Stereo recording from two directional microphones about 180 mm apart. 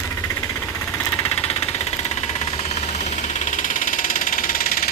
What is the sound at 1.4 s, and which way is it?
Vehicle, 35° left (ahead or behind).